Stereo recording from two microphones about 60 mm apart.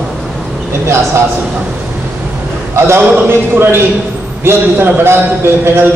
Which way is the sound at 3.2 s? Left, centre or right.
Right.